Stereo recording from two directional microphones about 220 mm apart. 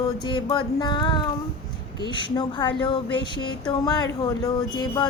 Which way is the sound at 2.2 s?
20° left (ahead or behind).